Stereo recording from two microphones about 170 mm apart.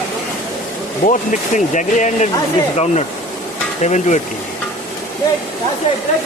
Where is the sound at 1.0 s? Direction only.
45° left (ahead or behind).